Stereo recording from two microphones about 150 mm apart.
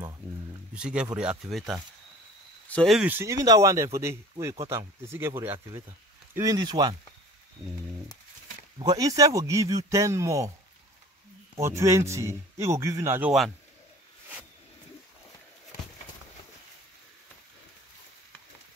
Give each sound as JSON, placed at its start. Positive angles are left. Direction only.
{"t": 0.7, "sound": "speech", "side_deg": -5}
{"t": 3.1, "sound": "speech", "side_deg": -20}
{"t": 8.7, "sound": "speech", "side_deg": -25}
{"t": 11.5, "sound": "speech", "side_deg": -20}
{"t": 15.7, "sound": "a sound", "side_deg": 90}